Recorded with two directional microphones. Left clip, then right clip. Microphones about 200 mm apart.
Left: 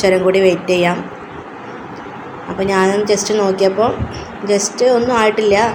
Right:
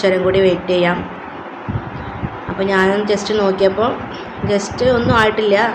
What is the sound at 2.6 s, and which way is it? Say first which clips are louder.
A woman's voice: left 1 dB; 10° left (ahead or behind).